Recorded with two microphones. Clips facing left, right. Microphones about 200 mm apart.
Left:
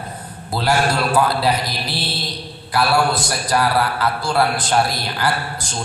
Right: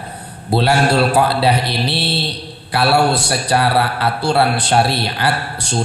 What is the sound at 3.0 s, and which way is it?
Speech, 65° right (ahead or behind).